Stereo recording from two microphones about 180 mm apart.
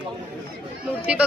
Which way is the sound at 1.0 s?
5° right (ahead or behind).